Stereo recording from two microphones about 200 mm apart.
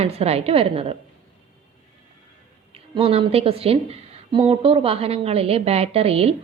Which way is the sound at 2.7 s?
30° right (ahead or behind).